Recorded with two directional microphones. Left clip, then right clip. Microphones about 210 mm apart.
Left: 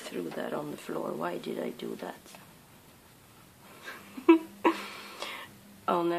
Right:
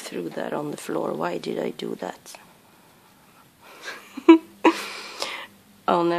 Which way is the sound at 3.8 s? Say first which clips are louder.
Right 8 dB; 45° right (ahead or behind).